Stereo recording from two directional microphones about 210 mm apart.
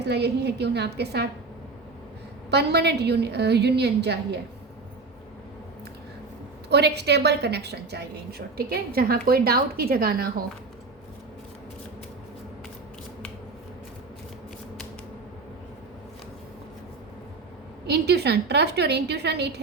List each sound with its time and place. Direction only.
0.0 s a woman's voice: 55° right (ahead or behind)
2.5 s a woman's voice: 50° right (ahead or behind)
6.7 s a woman's voice: 50° right (ahead or behind)
17.8 s a woman's voice: 50° right (ahead or behind)